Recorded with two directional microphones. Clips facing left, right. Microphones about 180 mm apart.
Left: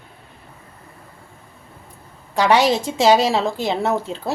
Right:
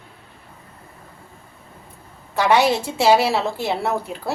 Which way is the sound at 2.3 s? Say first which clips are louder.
Left 1 dB; 15° left (ahead or behind).